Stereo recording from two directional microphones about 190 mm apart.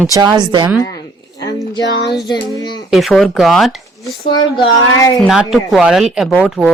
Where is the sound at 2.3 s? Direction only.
20° left (ahead or behind).